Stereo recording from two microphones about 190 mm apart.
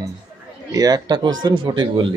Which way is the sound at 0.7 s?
20° right (ahead or behind).